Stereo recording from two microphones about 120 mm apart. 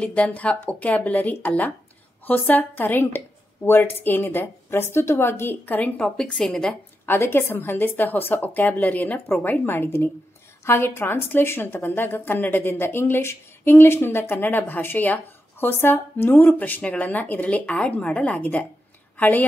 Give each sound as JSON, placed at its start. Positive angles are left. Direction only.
{"t": 0.0, "sound": "a woman's voice", "side_deg": 10}
{"t": 7.1, "sound": "a woman's voice", "side_deg": 20}